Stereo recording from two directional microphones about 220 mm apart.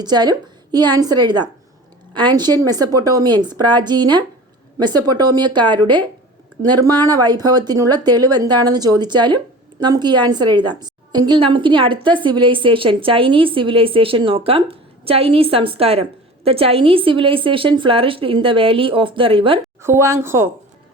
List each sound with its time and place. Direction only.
0.0 s a woman's voice: 20° right (ahead or behind)
19.8 s speech: 10° right (ahead or behind)